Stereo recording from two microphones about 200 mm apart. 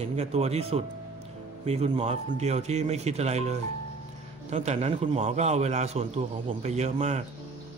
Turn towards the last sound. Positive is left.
turn(degrees=-35)  # may be behind; listen again after turning